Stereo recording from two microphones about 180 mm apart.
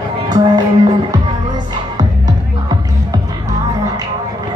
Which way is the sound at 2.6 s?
20° right (ahead or behind).